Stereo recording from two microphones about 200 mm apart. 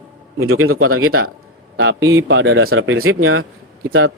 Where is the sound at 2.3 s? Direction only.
80° right.